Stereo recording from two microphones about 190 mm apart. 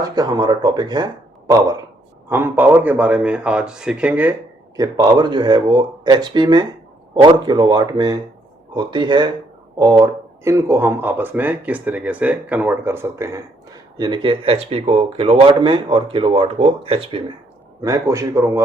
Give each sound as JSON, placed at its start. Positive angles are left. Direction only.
{"t": 0.2, "sound": "speech", "side_deg": -20}
{"t": 4.8, "sound": "speech", "side_deg": -20}